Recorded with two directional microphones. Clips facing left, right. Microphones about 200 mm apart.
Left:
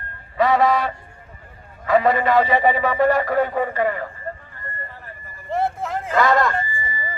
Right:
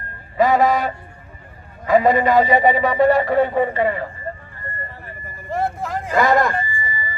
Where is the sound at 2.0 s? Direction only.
10° right (ahead or behind).